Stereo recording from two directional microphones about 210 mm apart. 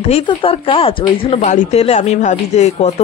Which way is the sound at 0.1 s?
25° left (ahead or behind).